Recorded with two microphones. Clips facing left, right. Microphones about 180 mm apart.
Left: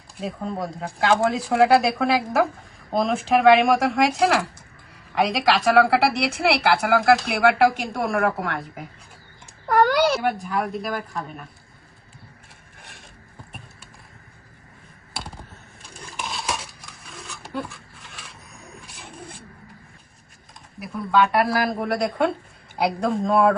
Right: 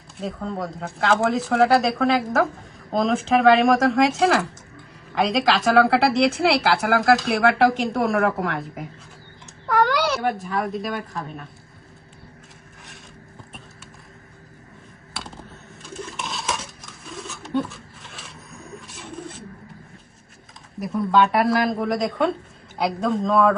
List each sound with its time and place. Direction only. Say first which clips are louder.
0.3 s a woman's voice: left 1 dB; 5° left (ahead or behind)
9.6 s a sound: left 2 dB; 45° left (ahead or behind)
9.9 s a woman's voice: left 2 dB; centre (ahead or behind)
15.8 s dishes: right 3 dB; centre (ahead or behind)
18.9 s pigeon: right 5 dB; centre (ahead or behind)
21.3 s a woman's voice: right 2 dB; centre (ahead or behind)